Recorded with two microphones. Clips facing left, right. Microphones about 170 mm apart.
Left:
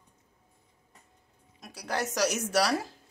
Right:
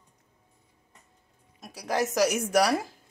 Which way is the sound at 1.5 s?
5° right (ahead or behind).